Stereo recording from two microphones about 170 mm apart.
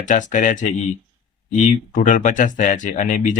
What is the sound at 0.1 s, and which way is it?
Speech, 50° left (ahead or behind).